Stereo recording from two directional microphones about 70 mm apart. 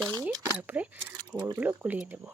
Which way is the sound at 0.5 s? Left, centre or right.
Right.